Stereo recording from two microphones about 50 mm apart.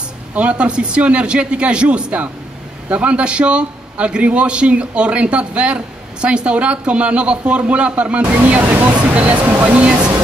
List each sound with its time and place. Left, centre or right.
0.4 s a man's voice: right